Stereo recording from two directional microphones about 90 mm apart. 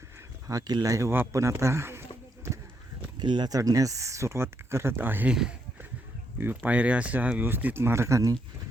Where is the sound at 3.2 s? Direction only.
55° right (ahead or behind).